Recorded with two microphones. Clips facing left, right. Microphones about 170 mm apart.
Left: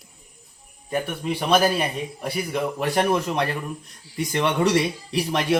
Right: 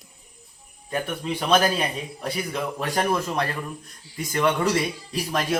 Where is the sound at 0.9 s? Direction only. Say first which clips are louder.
Left 2 dB; 10° left (ahead or behind).